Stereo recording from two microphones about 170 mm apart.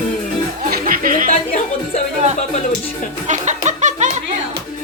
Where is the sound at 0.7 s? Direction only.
55° right (ahead or behind).